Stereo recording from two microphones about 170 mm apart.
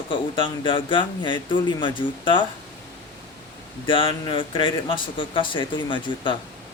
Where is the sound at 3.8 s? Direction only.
30° left (ahead or behind).